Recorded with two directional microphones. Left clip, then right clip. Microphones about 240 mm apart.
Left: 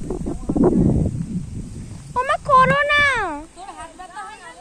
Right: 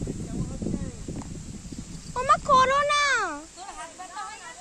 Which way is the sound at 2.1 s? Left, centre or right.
Centre.